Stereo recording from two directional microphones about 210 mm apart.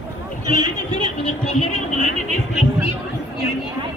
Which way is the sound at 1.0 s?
35° left (ahead or behind).